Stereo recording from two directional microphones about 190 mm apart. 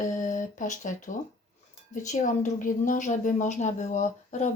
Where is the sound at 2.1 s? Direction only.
45° left (ahead or behind).